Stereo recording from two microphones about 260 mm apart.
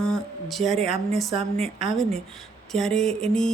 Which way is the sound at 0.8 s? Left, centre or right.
Right.